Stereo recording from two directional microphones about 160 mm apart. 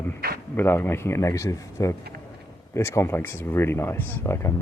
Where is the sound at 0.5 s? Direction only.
15° left (ahead or behind).